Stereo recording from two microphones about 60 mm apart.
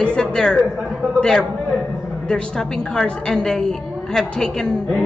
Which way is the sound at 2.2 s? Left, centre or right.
Centre.